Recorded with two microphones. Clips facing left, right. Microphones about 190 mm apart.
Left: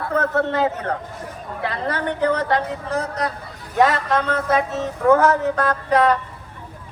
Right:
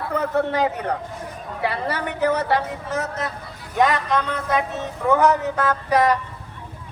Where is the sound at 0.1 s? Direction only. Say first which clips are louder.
Left 1 dB; 15° right (ahead or behind); by 4.4 s centre (ahead or behind).